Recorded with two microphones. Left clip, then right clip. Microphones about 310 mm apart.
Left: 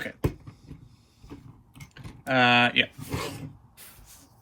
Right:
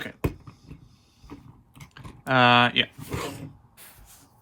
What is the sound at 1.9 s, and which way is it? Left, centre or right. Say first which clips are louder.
Speech: right 2 dB; centre.